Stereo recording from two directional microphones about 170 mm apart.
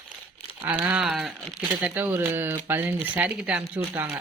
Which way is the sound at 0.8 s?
5° right (ahead or behind).